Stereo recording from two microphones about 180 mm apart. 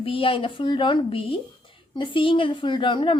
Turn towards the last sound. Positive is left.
turn(degrees=25)  # may be behind; listen again after turning